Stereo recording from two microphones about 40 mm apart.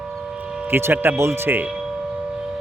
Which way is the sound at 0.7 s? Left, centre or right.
Right.